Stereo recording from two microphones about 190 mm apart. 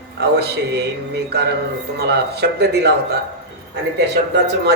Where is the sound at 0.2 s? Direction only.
60° right (ahead or behind).